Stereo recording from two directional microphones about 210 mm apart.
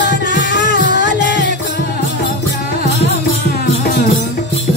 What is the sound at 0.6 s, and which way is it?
Music, 35° right (ahead or behind).